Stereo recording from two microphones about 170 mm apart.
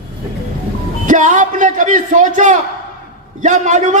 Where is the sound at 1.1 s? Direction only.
50° right (ahead or behind).